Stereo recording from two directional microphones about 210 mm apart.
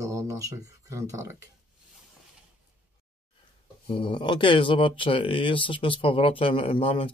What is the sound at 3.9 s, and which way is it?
Speech, 25° left (ahead or behind).